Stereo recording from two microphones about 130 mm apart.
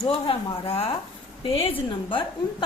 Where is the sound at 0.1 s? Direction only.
45° left (ahead or behind).